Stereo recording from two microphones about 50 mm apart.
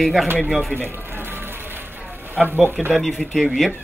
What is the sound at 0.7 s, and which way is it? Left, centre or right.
Music, right.